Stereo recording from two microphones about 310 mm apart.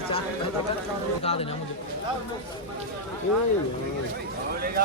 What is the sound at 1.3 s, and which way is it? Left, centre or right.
Speech, left.